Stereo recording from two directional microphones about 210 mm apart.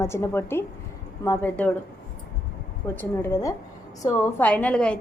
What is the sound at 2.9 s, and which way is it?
A woman's voice, 15° left (ahead or behind).